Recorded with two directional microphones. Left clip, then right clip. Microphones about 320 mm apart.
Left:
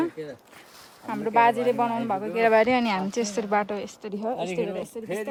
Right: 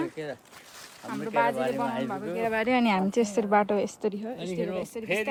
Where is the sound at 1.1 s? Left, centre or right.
Centre.